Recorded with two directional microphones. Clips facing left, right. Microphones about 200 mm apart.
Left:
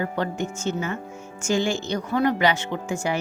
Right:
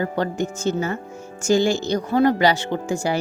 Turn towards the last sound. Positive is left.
turn(degrees=-35)  # may be behind; listen again after turning